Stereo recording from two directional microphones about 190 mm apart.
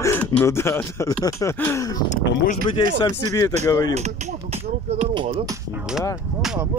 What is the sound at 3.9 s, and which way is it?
Speech, 35° right (ahead or behind).